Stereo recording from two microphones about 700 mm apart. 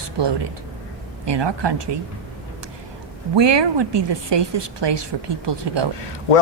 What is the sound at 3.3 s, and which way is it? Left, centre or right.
Speech, right.